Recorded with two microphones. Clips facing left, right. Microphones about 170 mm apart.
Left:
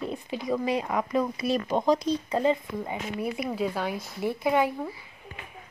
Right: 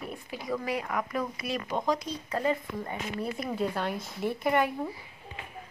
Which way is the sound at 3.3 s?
5° left (ahead or behind).